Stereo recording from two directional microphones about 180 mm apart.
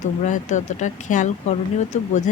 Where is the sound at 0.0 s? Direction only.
45° left (ahead or behind).